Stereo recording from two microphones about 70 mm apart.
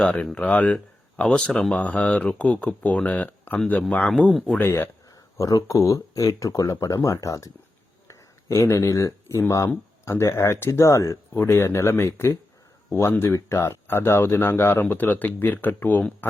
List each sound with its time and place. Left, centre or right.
0.0 s speech: centre
4.3 s speech: centre
4.5 s speech: left
5.4 s speech: left
8.0 s a sound: left
10.1 s speech: left
11.3 s speech: left